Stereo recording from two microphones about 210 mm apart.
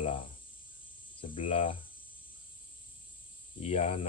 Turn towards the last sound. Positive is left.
turn(degrees=30)  # may be behind; listen again after turning